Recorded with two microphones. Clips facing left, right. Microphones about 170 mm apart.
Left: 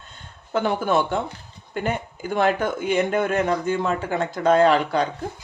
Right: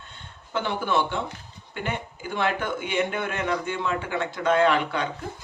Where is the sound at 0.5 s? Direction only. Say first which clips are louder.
Left 4 dB; 45° left (ahead or behind).